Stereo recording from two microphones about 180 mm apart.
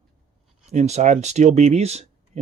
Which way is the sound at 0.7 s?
40° right (ahead or behind).